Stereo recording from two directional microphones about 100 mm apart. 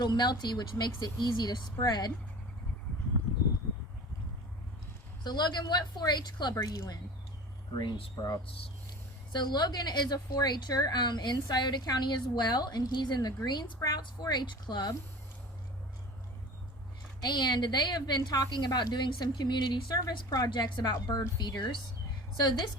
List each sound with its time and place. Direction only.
0.0 s a woman's voice: 45° left (ahead or behind)
5.2 s a woman's voice: 45° left (ahead or behind)
7.8 s speech: 55° left (ahead or behind)
9.3 s a woman's voice: 50° left (ahead or behind)
17.2 s a woman's voice: 45° left (ahead or behind)